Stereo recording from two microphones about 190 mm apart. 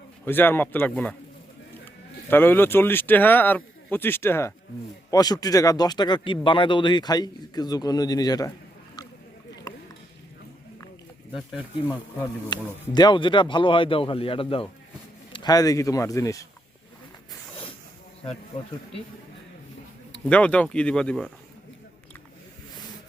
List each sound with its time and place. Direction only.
0.3 s speech: 10° left (ahead or behind)
2.3 s speech: 10° left (ahead or behind)
11.9 s speech: 20° left (ahead or behind)
20.2 s speech: 5° left (ahead or behind)